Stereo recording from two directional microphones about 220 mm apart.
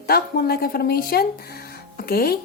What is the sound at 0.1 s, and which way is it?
Speech, 45° left (ahead or behind).